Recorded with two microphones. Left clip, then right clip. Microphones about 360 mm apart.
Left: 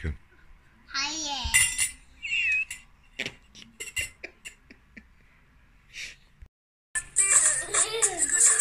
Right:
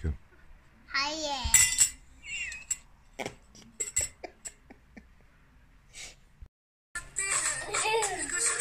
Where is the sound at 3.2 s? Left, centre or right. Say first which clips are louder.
Left 4 dB; right.